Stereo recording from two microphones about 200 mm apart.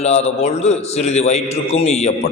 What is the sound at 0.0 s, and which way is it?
A man's voice, 35° left (ahead or behind).